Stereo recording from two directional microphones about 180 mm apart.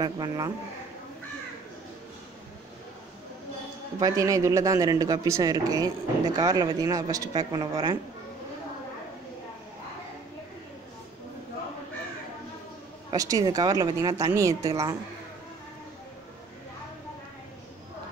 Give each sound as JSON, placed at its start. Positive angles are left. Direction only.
{"t": 0.0, "sound": "a man's voice", "side_deg": -25}
{"t": 4.0, "sound": "a man's voice", "side_deg": -20}
{"t": 13.1, "sound": "a man's voice", "side_deg": -20}